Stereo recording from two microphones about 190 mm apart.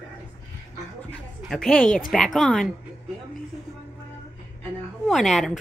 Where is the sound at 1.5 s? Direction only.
Centre (ahead or behind).